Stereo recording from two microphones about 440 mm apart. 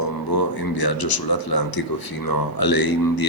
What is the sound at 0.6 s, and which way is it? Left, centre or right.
Speech, left.